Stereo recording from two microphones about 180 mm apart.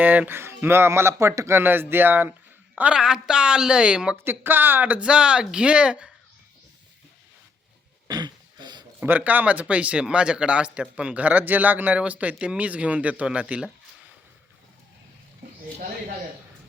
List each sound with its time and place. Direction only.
0.0 s a woman's voice: 10° right (ahead or behind)
8.0 s throat clearing: 25° right (ahead or behind)
9.0 s speech: 10° right (ahead or behind)